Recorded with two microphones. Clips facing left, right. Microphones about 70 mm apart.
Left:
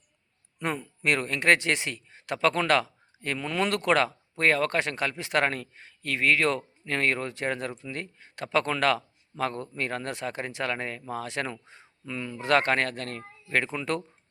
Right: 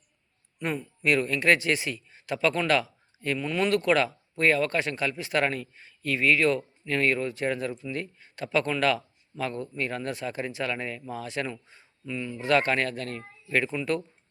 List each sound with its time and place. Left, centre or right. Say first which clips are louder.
0.6 s speech: even; left